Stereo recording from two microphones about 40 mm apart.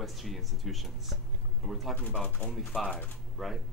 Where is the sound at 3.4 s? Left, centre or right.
Centre.